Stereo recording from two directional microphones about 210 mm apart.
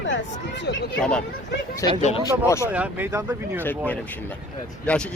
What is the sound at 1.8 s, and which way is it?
Speech, 15° left (ahead or behind).